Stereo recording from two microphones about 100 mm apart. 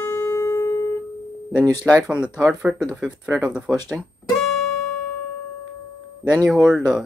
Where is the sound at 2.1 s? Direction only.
10° right (ahead or behind).